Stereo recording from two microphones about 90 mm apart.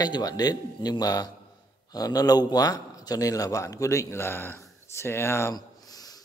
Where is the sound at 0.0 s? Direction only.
45° left (ahead or behind); by 5.5 s 30° left (ahead or behind).